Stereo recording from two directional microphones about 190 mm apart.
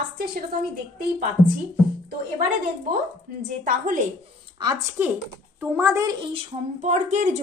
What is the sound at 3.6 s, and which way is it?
Speech, 45° right (ahead or behind).